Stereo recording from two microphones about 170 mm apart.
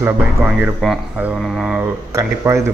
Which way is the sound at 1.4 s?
Centre (ahead or behind).